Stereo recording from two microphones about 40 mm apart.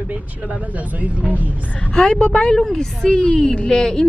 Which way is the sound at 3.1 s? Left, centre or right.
Left.